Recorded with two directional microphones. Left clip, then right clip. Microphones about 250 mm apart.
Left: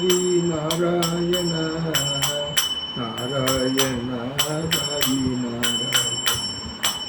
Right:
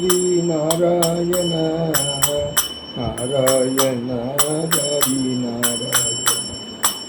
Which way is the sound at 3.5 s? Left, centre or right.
Right.